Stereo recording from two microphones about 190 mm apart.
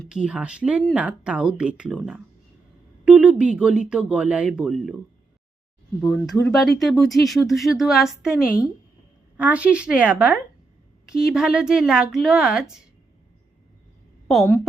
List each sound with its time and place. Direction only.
0.0 s speech: 5° right (ahead or behind)
6.0 s speech: centre (ahead or behind)
9.4 s a woman's voice: 5° right (ahead or behind)
14.3 s speech: centre (ahead or behind)